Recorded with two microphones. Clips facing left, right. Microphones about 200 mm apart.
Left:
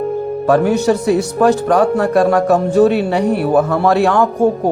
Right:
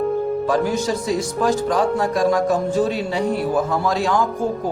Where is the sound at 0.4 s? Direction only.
65° left (ahead or behind).